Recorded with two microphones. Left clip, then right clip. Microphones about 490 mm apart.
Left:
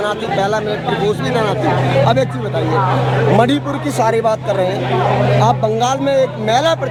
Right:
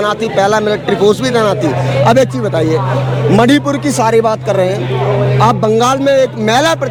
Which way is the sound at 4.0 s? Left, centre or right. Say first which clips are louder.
Right 3 dB; right.